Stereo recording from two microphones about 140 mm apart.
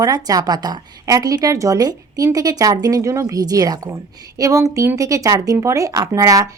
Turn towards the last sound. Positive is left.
turn(degrees=-25)  # may be behind; listen again after turning